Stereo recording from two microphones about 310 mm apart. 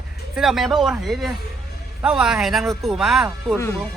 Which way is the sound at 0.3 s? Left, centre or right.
Centre.